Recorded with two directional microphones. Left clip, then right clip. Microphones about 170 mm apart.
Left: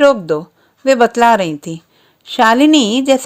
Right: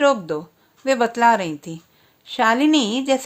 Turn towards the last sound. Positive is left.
turn(degrees=40)  # may be behind; listen again after turning